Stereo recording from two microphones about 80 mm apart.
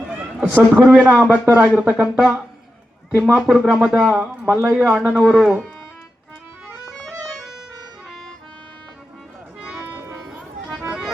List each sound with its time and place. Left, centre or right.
0.3 s a man's voice: centre
1.7 s a man's voice: centre
6.9 s music: centre
9.7 s music: right